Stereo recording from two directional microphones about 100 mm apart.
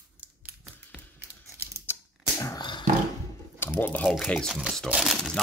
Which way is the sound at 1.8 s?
25° left (ahead or behind).